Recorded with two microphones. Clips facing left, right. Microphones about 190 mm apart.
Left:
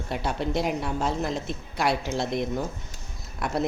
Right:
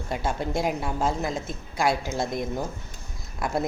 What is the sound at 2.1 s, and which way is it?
Speech, 50° right (ahead or behind).